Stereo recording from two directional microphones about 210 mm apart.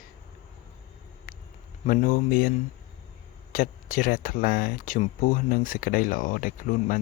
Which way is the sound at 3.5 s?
40° left (ahead or behind).